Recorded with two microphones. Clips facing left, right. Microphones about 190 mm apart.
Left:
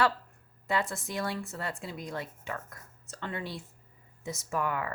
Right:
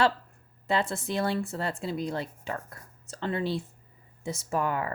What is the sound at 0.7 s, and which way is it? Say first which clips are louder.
Speech: right 4 dB; 30° right (ahead or behind).